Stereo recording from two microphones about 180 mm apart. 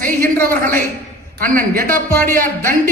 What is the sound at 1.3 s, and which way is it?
A man's voice, 50° right (ahead or behind).